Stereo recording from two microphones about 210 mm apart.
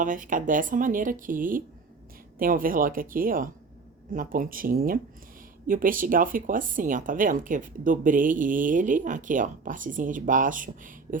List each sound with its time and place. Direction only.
0.0 s speech: 40° right (ahead or behind)